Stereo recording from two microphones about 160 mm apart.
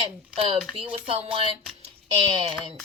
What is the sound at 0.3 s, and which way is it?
Speech, 35° right (ahead or behind).